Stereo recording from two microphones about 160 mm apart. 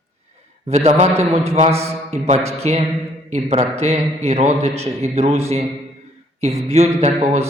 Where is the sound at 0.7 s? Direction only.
45° right (ahead or behind).